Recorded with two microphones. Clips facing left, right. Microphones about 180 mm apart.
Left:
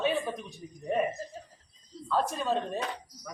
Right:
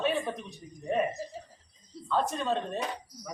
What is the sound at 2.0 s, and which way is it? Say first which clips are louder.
Speech: even; 5° left (ahead or behind).